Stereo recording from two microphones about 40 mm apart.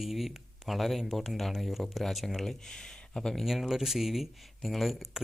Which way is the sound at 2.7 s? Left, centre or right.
Centre.